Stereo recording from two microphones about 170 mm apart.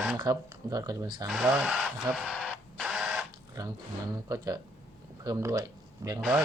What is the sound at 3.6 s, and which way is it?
Speech, 20° right (ahead or behind).